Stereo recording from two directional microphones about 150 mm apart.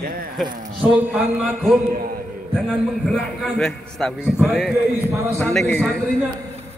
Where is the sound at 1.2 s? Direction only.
10° right (ahead or behind).